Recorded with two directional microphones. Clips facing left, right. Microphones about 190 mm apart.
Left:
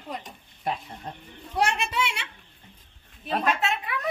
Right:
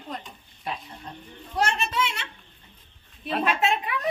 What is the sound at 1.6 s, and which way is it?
Speech, 15° left (ahead or behind).